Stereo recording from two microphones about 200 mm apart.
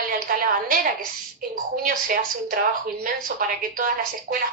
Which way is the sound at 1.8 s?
45° right (ahead or behind).